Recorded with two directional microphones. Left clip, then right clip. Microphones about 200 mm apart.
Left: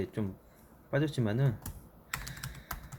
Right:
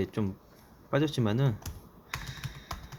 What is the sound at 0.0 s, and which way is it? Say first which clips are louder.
Speech: right 4 dB; 15° right (ahead or behind).